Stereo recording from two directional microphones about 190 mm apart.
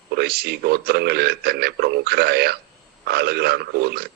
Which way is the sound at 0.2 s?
55° right (ahead or behind).